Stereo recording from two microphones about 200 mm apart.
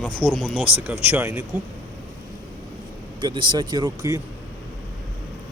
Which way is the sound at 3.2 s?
25° right (ahead or behind).